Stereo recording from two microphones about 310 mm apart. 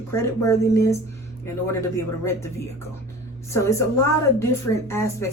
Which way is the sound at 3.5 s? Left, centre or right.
Centre.